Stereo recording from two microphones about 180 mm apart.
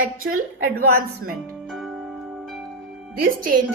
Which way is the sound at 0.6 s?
55° right (ahead or behind).